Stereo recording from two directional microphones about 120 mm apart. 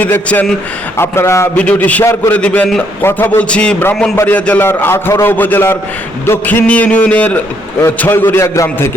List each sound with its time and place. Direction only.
0.0 s a man's voice: 15° left (ahead or behind)
1.5 s a man's voice: 10° left (ahead or behind)